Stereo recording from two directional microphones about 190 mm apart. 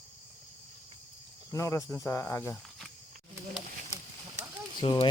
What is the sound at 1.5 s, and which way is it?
Speech, 15° left (ahead or behind).